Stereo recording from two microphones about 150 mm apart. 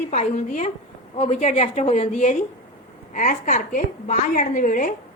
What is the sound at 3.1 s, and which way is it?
A woman's voice, 55° left (ahead or behind).